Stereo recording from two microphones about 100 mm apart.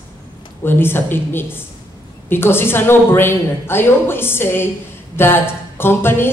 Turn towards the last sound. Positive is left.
turn(degrees=25)  # may be behind; listen again after turning